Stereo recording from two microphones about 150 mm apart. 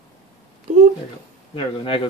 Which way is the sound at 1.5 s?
35° left (ahead or behind).